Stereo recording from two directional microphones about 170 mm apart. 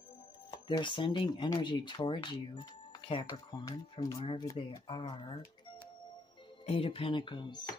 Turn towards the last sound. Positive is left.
turn(degrees=25)  # may be behind; listen again after turning